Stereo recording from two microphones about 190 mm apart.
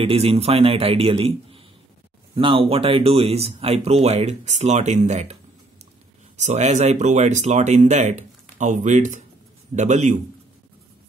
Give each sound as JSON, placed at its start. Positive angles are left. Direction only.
{"t": 0.0, "sound": "speech", "side_deg": -30}